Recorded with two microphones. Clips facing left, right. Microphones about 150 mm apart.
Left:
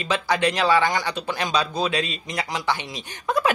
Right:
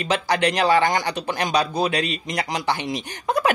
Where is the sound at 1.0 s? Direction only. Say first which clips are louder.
Right 2 dB; 15° right (ahead or behind).